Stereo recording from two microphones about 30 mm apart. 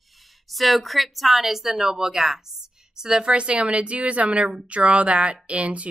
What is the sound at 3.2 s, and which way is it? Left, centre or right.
Speech, right.